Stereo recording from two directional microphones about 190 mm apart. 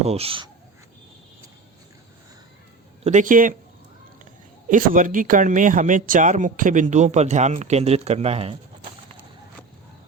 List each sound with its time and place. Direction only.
0.0 s speech: 30° right (ahead or behind)
3.0 s speech: 40° right (ahead or behind)
4.7 s speech: 45° right (ahead or behind)